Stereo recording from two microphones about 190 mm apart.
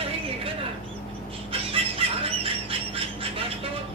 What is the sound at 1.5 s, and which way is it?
Chicken, 30° right (ahead or behind).